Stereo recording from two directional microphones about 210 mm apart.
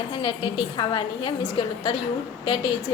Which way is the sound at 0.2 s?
20° left (ahead or behind).